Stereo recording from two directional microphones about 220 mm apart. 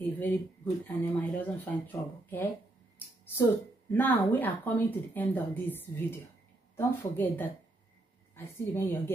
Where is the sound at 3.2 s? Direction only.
10° left (ahead or behind).